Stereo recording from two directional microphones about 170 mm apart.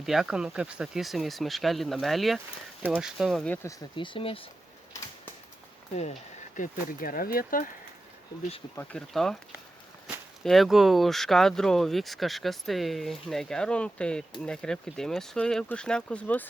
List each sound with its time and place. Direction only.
0.0 s speech: centre (ahead or behind)
3.9 s speech: 30° left (ahead or behind)
6.6 s speech: 55° left (ahead or behind)
8.7 s speech: 10° left (ahead or behind)